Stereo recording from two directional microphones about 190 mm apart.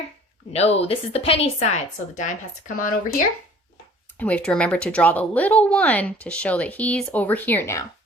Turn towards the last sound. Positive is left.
turn(degrees=15)  # may be behind; listen again after turning